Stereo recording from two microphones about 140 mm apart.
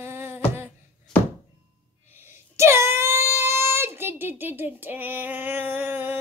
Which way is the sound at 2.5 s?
20° right (ahead or behind).